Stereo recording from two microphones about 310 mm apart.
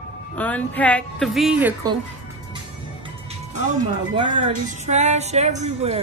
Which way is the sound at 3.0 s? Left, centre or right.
Centre.